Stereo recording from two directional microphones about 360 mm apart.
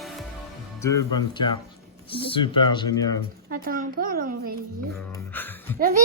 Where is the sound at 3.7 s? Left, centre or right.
Right.